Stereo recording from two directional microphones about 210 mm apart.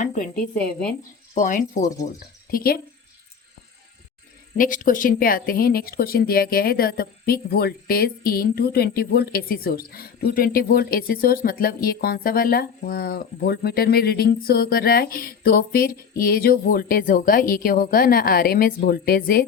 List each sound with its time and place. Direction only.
0.0 s speech: 35° left (ahead or behind)
4.5 s speech: 40° left (ahead or behind)